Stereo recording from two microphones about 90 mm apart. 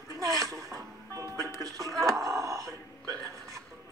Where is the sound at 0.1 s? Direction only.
40° right (ahead or behind).